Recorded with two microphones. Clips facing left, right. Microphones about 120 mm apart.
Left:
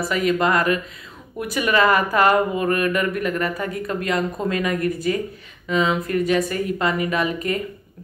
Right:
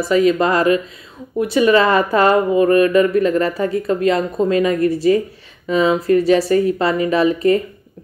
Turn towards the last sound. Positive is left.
turn(degrees=-30)  # may be behind; listen again after turning